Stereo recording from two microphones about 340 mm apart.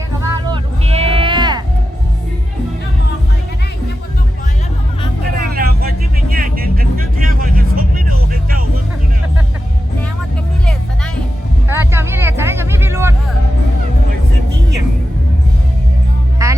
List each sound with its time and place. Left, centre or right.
0.2 s music: centre
5.5 s vehicle: right
6.3 s music: right
11.7 s vehicle: centre
16.4 s music: centre